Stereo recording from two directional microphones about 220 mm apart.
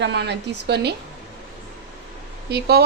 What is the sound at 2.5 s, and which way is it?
Speech, 45° right (ahead or behind).